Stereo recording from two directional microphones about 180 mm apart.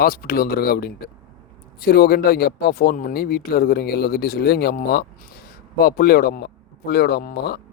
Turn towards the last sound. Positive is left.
turn(degrees=65)  # may be behind; listen again after turning